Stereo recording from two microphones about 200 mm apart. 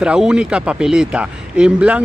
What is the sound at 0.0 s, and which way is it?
Speech, 5° right (ahead or behind).